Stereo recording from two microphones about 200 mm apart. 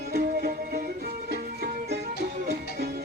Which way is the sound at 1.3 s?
55° right (ahead or behind).